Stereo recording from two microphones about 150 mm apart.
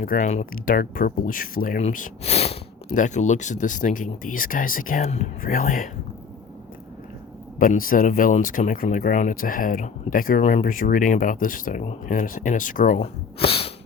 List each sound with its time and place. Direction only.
0.0 s speech: 60° left (ahead or behind)
2.2 s speech: 45° left (ahead or behind)
5.4 s speech: 70° left (ahead or behind)
7.6 s speech: 65° left (ahead or behind)
13.0 s speech: 40° left (ahead or behind)